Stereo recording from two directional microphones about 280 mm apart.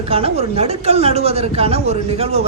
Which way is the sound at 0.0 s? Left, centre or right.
Right.